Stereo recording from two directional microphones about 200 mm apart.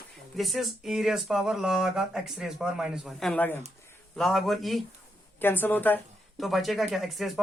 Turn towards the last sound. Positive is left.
turn(degrees=0)  # may be behind; listen again after turning